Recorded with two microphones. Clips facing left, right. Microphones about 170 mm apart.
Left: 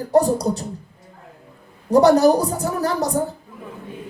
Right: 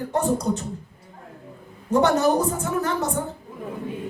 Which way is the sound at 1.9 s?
35° left (ahead or behind).